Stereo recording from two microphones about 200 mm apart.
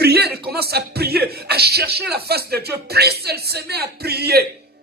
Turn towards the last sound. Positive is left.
turn(degrees=-55)  # may be behind; listen again after turning